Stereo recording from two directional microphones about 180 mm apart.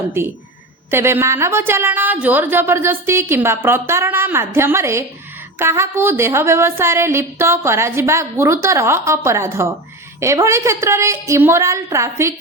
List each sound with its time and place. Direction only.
0.9 s a woman's voice: 15° right (ahead or behind)